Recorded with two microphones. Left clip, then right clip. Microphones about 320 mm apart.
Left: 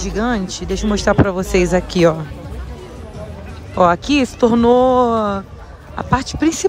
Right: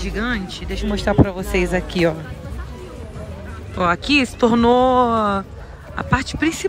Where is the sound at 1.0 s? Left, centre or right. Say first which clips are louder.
Left 3 dB; right.